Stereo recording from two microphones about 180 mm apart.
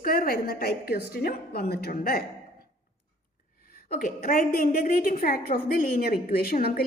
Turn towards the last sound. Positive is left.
turn(degrees=60)  # may be behind; listen again after turning